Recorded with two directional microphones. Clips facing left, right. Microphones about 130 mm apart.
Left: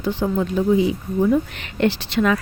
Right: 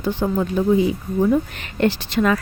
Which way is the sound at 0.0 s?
45° right (ahead or behind).